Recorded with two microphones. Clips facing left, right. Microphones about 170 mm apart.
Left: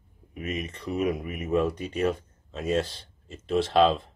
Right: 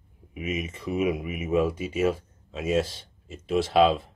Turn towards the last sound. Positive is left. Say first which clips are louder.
# right 1 dB
turn(degrees=-5)  # may be behind; listen again after turning